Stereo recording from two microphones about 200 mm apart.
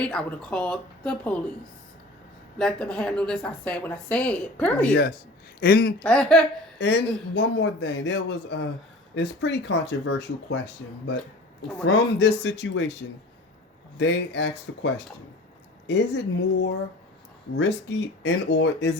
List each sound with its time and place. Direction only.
0.0 s a woman's voice: 5° left (ahead or behind)
2.6 s a woman's voice: 5° left (ahead or behind)
5.5 s speech: 50° left (ahead or behind)
6.0 s a woman's voice: 5° left (ahead or behind)
6.7 s a man's voice: 60° left (ahead or behind)
12.2 s a man's voice: 60° left (ahead or behind)